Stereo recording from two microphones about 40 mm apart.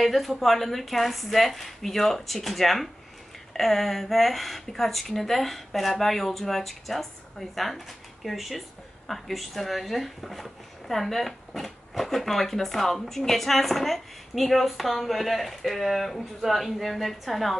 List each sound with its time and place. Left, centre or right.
0.0 s speech: centre